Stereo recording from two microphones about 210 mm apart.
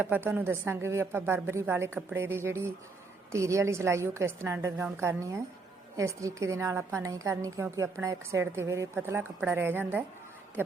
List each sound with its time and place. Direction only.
0.0 s a woman's voice: 10° right (ahead or behind)